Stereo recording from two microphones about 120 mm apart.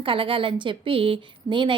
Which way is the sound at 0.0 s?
45° right (ahead or behind).